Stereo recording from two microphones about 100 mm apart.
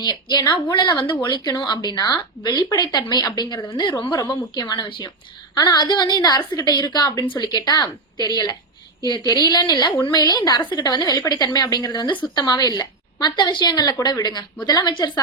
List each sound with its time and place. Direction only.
0.0 s a woman's voice: 45° left (ahead or behind)
4.9 s speech: 55° left (ahead or behind)
5.5 s a woman's voice: 40° left (ahead or behind)